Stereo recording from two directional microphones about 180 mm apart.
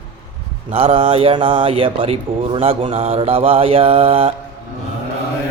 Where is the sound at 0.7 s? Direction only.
30° right (ahead or behind).